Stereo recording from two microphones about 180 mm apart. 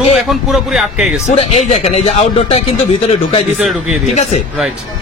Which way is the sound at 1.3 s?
40° left (ahead or behind).